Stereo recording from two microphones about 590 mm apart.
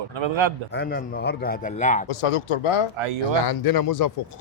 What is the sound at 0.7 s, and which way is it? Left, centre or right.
A man's voice, centre.